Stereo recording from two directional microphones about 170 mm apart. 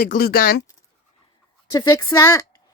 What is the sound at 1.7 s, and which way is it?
Speech, 25° left (ahead or behind).